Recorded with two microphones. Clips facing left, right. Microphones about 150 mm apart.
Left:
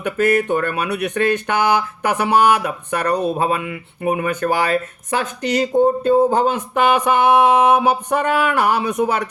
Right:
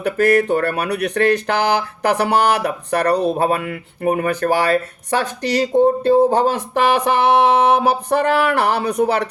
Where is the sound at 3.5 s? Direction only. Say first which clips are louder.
Right 1 dB; 50° right (ahead or behind).